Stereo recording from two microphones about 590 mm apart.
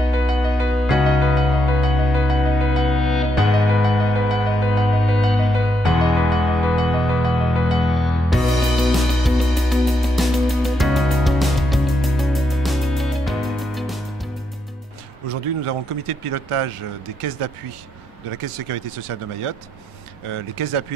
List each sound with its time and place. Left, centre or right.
0.2 s music: centre
15.2 s a sound: right
17.2 s speech: right